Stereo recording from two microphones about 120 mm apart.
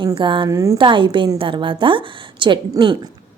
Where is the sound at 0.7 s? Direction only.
45° right (ahead or behind).